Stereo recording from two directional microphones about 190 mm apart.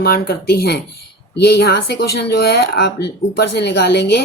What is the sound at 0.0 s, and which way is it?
Speech, 55° left (ahead or behind).